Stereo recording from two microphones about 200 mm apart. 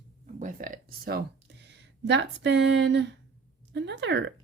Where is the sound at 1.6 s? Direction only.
60° right (ahead or behind).